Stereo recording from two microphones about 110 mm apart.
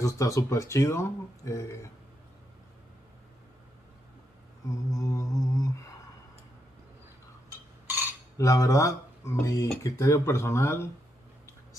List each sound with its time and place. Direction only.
0.0 s speech: 30° left (ahead or behind)
4.6 s a sound: 30° left (ahead or behind)
8.4 s speech: 30° left (ahead or behind)